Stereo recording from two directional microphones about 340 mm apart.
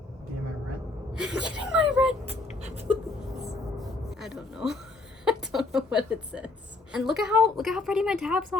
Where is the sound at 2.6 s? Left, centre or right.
Centre.